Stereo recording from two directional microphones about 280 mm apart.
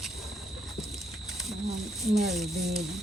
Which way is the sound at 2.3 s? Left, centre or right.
Centre.